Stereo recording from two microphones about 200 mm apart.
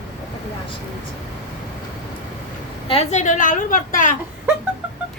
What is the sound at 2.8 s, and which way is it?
A woman's voice, 30° left (ahead or behind).